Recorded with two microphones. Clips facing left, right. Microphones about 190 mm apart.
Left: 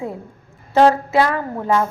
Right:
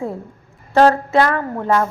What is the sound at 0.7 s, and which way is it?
A woman's voice, 15° left (ahead or behind).